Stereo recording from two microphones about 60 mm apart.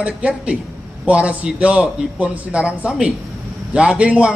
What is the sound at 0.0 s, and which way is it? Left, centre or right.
A man's voice, right.